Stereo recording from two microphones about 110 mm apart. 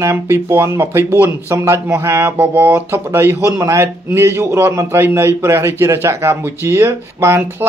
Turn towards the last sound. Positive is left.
turn(degrees=-25)  # may be behind; listen again after turning